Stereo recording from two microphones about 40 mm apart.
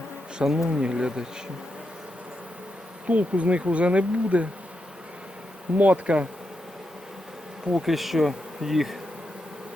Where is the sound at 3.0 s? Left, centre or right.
Right.